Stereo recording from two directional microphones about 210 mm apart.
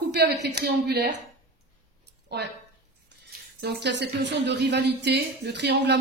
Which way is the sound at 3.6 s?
50° right (ahead or behind).